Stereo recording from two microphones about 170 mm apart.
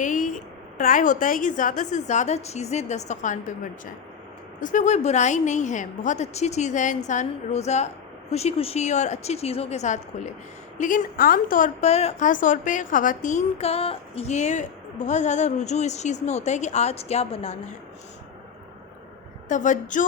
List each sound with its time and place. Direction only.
0.0 s a sound: 50° left (ahead or behind)
0.8 s a woman's voice: 50° left (ahead or behind)
19.5 s a woman's voice: 45° left (ahead or behind)